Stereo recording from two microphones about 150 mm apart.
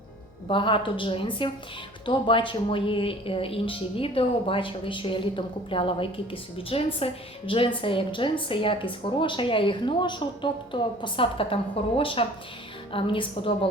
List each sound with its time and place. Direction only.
0.4 s a woman's voice: 35° left (ahead or behind)